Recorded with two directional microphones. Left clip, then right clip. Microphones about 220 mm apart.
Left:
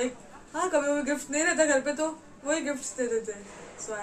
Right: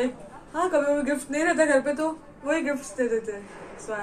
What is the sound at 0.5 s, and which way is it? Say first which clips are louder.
Speech: right 3 dB; 5° left (ahead or behind).